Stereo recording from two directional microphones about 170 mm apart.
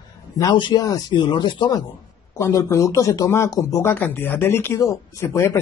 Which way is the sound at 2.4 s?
15° left (ahead or behind).